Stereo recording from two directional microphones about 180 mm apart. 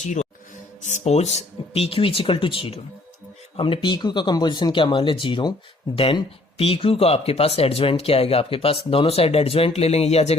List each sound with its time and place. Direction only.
0.8 s speech: 40° left (ahead or behind)